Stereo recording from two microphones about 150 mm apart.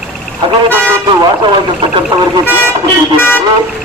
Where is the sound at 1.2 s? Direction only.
30° right (ahead or behind).